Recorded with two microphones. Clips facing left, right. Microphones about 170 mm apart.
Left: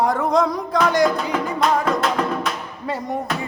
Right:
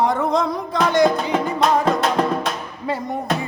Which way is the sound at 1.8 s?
35° right (ahead or behind).